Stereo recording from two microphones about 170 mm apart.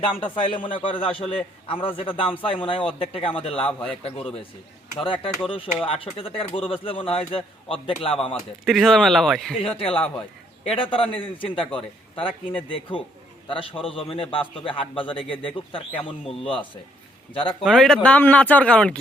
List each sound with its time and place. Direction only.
0.0 s a man's voice: 30° left (ahead or behind)
3.6 s speech: 5° left (ahead or behind)
4.0 s speech: 35° left (ahead or behind)
8.6 s speech: centre (ahead or behind)
9.6 s speech: 35° left (ahead or behind)
17.6 s speech: centre (ahead or behind)